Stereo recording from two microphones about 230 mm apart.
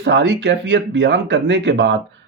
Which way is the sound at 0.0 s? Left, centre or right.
Right.